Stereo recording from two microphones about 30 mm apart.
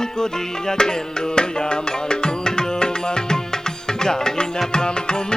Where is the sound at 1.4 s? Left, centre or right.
Left.